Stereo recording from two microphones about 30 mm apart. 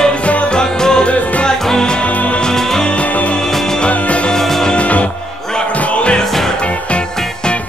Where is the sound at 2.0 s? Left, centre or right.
Left.